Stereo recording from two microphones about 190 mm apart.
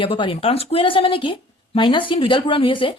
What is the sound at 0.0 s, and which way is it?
Speech, 25° left (ahead or behind).